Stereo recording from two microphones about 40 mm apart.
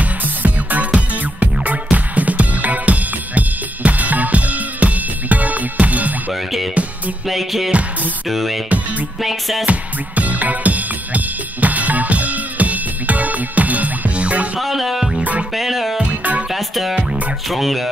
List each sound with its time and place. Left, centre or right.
0.0 s music: right
7.2 s music: centre
9.7 s music: right
14.6 s music: centre